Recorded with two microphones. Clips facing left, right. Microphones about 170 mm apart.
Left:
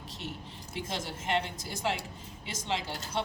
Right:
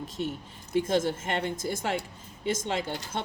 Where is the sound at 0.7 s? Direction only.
50° right (ahead or behind).